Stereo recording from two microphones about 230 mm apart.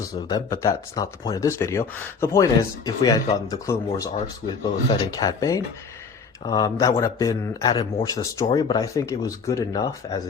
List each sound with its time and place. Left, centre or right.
0.0 s speech: centre
5.1 s speech: centre